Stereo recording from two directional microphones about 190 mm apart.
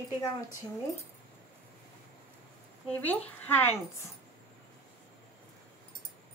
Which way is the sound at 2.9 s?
10° left (ahead or behind).